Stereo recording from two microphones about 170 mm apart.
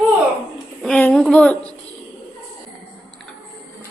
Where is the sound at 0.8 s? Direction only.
10° left (ahead or behind).